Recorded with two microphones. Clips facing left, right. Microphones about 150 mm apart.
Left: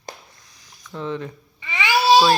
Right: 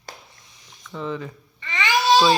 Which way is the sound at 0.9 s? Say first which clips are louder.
Left 1 dB; centre (ahead or behind).